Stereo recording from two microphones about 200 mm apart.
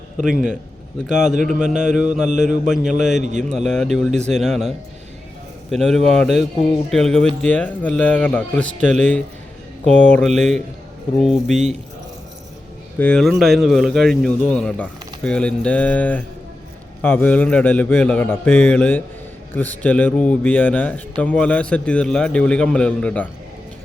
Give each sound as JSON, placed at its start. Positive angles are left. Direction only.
{"t": 1.0, "sound": "speech", "side_deg": 0}
{"t": 5.7, "sound": "a man's voice", "side_deg": 0}
{"t": 13.0, "sound": "a man's voice", "side_deg": 5}